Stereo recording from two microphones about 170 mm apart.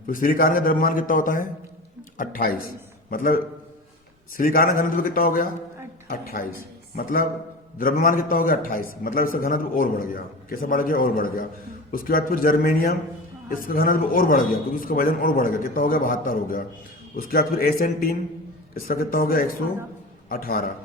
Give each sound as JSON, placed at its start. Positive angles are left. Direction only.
{"t": 0.1, "sound": "a man's voice", "side_deg": 55}